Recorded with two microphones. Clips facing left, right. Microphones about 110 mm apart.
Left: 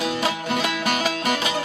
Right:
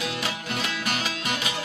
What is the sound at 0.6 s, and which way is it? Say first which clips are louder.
Music: left 4 dB; 45° left (ahead or behind).